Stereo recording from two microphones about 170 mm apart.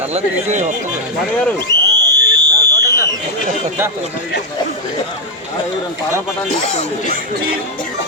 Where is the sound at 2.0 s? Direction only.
20° right (ahead or behind).